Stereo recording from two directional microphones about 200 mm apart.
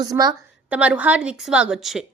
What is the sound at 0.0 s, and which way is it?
Speech, 20° right (ahead or behind).